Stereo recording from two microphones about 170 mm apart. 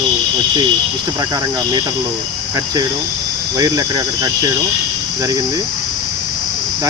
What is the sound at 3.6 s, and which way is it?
Speech, 20° right (ahead or behind).